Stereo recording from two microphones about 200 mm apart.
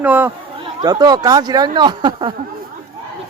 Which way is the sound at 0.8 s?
20° right (ahead or behind).